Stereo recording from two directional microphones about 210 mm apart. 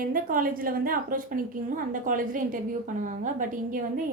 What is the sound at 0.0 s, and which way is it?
A woman's voice, 40° right (ahead or behind).